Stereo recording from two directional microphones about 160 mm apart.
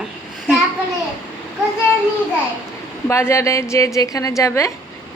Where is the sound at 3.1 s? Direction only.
20° left (ahead or behind).